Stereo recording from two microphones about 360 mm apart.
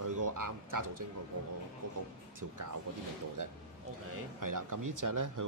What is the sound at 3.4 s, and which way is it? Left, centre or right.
Speech, right.